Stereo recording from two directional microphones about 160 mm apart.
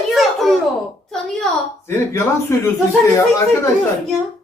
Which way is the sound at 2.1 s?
15° left (ahead or behind).